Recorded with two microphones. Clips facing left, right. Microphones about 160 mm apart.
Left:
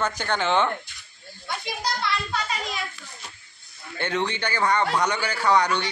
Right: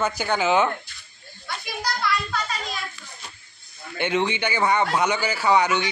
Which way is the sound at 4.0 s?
15° right (ahead or behind).